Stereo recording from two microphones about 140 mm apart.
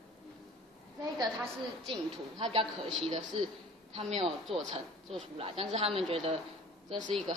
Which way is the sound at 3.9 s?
45° right (ahead or behind).